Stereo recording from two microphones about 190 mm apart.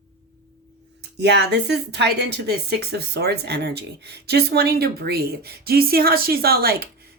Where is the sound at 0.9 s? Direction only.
60° right (ahead or behind).